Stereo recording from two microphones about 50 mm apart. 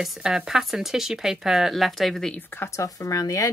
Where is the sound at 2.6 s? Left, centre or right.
Left.